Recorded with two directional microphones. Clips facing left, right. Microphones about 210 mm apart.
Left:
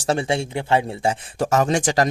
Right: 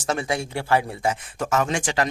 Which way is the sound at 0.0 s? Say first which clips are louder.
Left 4 dB; 30° left (ahead or behind).